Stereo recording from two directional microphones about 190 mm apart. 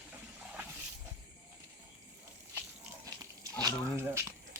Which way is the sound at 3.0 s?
20° right (ahead or behind).